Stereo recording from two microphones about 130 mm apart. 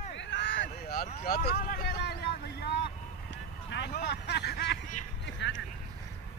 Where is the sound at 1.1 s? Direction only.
70° left (ahead or behind).